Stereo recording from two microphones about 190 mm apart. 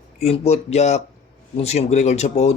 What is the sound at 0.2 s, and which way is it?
Speech, 35° left (ahead or behind).